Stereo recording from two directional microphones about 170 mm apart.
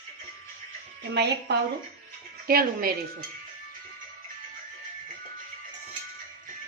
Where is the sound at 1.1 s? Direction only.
75° right (ahead or behind).